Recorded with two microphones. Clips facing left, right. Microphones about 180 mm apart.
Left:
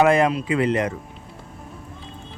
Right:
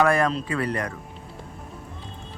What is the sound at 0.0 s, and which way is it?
Speech, 20° left (ahead or behind).